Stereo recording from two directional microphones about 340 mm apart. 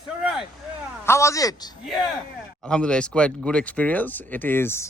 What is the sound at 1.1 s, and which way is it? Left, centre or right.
Speech, centre.